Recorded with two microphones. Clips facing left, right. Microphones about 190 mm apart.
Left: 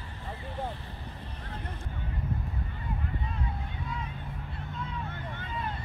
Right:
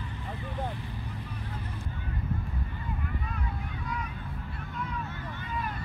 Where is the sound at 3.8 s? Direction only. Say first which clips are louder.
Right 2 dB; 25° left (ahead or behind).